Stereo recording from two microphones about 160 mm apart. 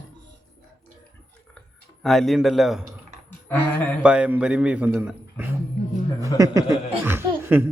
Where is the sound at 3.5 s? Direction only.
10° left (ahead or behind).